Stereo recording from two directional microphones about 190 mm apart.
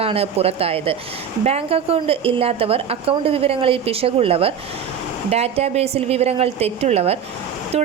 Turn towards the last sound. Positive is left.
turn(degrees=-35)  # may be behind; listen again after turning